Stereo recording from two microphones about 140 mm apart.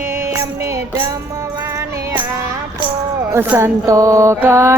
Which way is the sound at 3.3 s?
15° right (ahead or behind).